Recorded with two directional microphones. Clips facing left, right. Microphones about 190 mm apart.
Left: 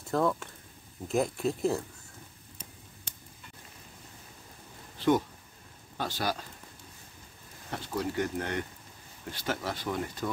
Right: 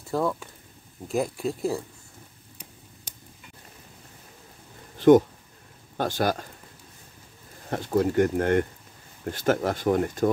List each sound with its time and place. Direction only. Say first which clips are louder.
0.1 s speech: right 1 dB; 5° right (ahead or behind)
5.9 s speech: right 7 dB; 50° right (ahead or behind)
7.7 s speech: right 10 dB; 50° right (ahead or behind)